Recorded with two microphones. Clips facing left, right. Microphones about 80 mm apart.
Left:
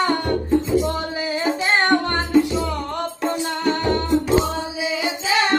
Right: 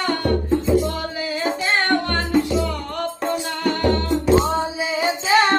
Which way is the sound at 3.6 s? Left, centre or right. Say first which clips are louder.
Right 1 dB; centre.